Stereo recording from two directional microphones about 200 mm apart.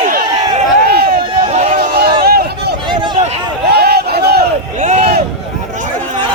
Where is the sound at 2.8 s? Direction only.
25° right (ahead or behind).